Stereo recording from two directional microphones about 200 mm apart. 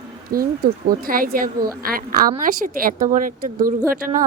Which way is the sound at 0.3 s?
50° right (ahead or behind).